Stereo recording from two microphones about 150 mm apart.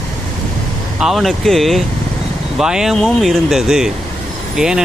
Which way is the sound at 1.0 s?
Centre (ahead or behind).